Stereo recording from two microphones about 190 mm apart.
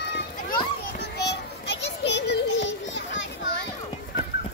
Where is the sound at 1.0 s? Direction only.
60° left (ahead or behind).